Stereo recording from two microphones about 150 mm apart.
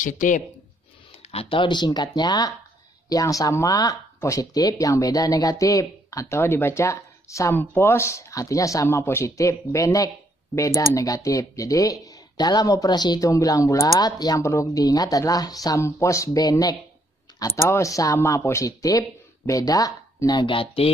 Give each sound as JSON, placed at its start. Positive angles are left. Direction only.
{"t": 0.0, "sound": "speech", "side_deg": 60}
{"t": 1.3, "sound": "speech", "side_deg": 35}